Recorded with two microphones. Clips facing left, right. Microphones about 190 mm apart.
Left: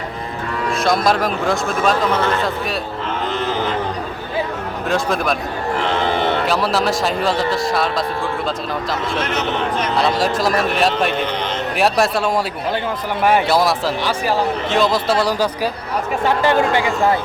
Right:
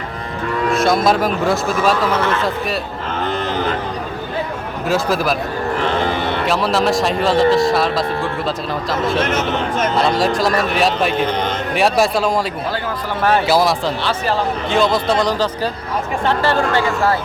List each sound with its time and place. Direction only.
0.7 s speech: centre (ahead or behind)
4.9 s speech: 5° right (ahead or behind)
6.4 s speech: centre (ahead or behind)
9.3 s speech: 45° right (ahead or behind)
10.0 s speech: centre (ahead or behind)
13.5 s speech: centre (ahead or behind)
14.0 s a man's voice: 10° left (ahead or behind)
14.7 s a man's voice: centre (ahead or behind); by 17.2 s 15° left (ahead or behind)